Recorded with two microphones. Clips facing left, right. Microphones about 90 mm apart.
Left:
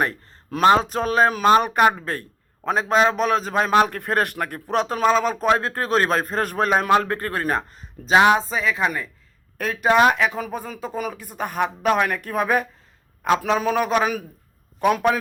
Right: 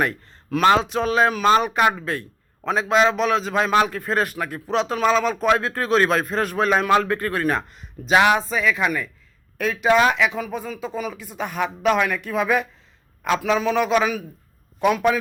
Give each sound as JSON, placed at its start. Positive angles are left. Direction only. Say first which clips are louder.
{"t": 0.0, "sound": "a man's voice", "louder": "right 1 dB", "side_deg": 35}